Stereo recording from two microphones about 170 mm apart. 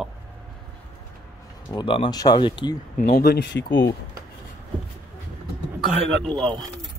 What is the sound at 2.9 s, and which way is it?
Speech, 60° left (ahead or behind).